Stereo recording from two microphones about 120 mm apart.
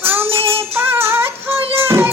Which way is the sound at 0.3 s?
50° right (ahead or behind).